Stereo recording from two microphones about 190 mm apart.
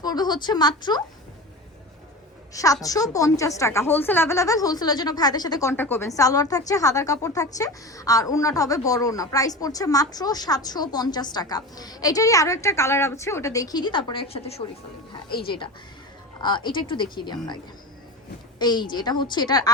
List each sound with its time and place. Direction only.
0.0 s a woman's voice: 20° left (ahead or behind)
2.5 s a woman's voice: 15° left (ahead or behind)
16.4 s a woman's voice: 25° left (ahead or behind)
18.6 s a woman's voice: 20° left (ahead or behind)